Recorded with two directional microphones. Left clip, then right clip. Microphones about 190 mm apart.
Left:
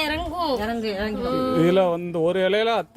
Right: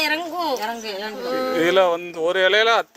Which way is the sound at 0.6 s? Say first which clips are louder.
Left 1 dB; 25° left (ahead or behind).